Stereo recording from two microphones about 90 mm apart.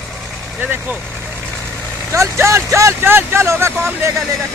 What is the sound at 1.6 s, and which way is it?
Vehicle, 30° right (ahead or behind).